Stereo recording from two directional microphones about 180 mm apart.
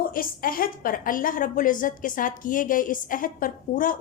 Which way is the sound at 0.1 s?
50° left (ahead or behind).